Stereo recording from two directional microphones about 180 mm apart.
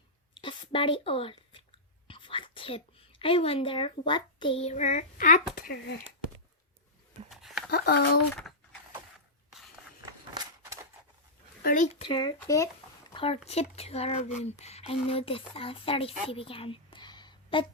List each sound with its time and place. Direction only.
0.3 s a sound: 30° left (ahead or behind)
2.0 s speech: 30° left (ahead or behind); by 5.4 s 50° left (ahead or behind)
5.5 s speech: 60° left (ahead or behind)
7.3 s a sound: centre (ahead or behind)
7.7 s speech: 60° left (ahead or behind)
11.6 s speech: 50° left (ahead or behind)
11.9 s speech: 25° left (ahead or behind)
13.1 s speech: 35° left (ahead or behind)